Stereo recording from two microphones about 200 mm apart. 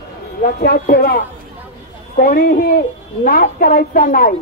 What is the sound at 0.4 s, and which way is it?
A woman's voice, 45° left (ahead or behind).